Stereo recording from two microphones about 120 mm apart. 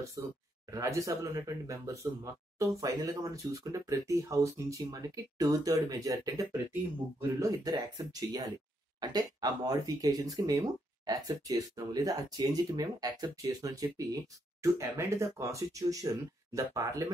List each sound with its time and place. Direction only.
0.2 s speech: 30° right (ahead or behind)
6.7 s speech: 20° right (ahead or behind)
7.6 s speech: 30° right (ahead or behind)